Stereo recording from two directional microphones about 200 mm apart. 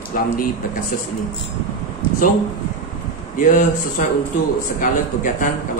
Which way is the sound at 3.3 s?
40° left (ahead or behind).